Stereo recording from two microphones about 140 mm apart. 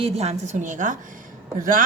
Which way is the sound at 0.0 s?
50° right (ahead or behind).